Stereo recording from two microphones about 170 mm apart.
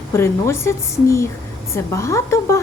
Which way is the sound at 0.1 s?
15° left (ahead or behind).